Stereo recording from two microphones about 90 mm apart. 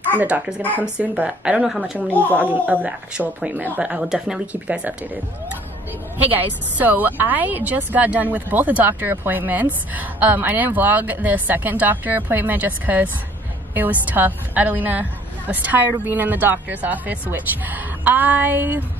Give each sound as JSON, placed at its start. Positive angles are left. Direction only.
{"t": 0.1, "sound": "speech", "side_deg": -20}
{"t": 2.0, "sound": "speech", "side_deg": 20}
{"t": 2.3, "sound": "a woman's voice", "side_deg": -20}
{"t": 3.9, "sound": "speech", "side_deg": -5}
{"t": 6.3, "sound": "a woman's voice", "side_deg": -20}